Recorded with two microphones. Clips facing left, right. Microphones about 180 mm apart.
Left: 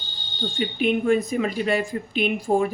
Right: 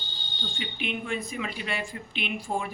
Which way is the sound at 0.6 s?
40° left (ahead or behind).